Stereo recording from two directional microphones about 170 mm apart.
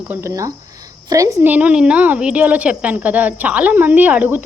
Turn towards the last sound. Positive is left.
turn(degrees=-10)  # may be behind; listen again after turning